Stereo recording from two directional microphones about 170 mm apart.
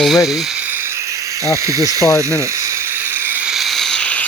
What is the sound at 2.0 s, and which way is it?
Speech, 20° left (ahead or behind).